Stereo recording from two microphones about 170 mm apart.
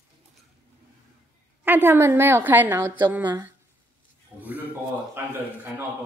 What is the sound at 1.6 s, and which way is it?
A woman's voice, 10° right (ahead or behind).